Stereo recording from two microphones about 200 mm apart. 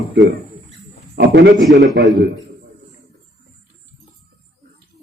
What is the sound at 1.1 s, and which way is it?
Speech, 60° right (ahead or behind).